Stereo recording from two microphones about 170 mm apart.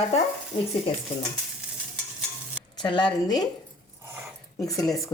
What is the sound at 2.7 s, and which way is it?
Speech, 25° left (ahead or behind).